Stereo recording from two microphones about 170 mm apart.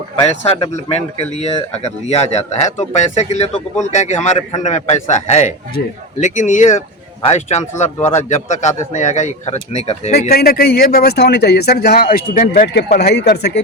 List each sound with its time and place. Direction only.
0.4 s speech: 35° left (ahead or behind)
10.2 s speech: 65° left (ahead or behind)
12.6 s speech: 75° left (ahead or behind)